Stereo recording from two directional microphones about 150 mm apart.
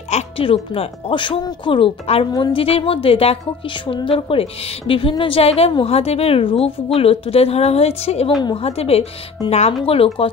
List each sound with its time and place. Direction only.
0.1 s a woman's voice: 35° left (ahead or behind)